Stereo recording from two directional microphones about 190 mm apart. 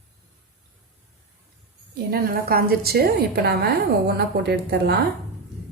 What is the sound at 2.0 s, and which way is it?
A woman's voice, 55° right (ahead or behind).